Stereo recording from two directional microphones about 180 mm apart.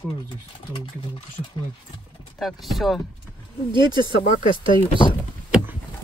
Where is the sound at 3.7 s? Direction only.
25° right (ahead or behind).